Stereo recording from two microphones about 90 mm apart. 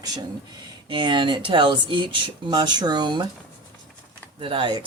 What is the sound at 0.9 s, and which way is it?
Speech, 65° right (ahead or behind).